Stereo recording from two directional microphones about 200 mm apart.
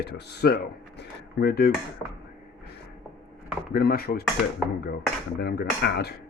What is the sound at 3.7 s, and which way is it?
Speech, 50° left (ahead or behind).